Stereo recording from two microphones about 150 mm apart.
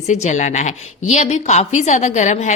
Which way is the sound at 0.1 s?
55° left (ahead or behind).